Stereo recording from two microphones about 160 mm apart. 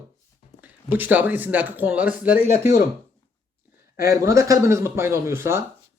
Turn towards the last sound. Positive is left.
turn(degrees=-15)  # may be behind; listen again after turning